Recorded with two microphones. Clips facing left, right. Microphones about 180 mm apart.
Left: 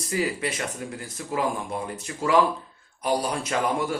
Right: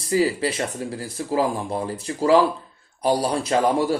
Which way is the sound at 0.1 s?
30° right (ahead or behind).